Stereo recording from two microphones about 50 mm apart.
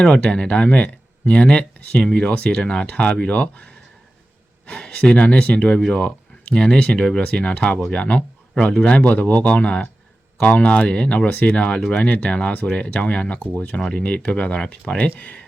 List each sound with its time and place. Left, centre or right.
0.0 s speech: centre